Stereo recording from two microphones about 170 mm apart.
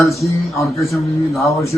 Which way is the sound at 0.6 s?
Centre (ahead or behind).